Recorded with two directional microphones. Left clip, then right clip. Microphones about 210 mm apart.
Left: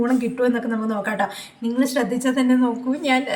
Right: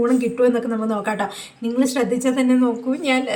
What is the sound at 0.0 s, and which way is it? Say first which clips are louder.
A woman's voice: right 3 dB; 5° right (ahead or behind).